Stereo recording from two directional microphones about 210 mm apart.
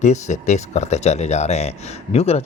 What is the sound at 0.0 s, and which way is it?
Speech, 35° left (ahead or behind).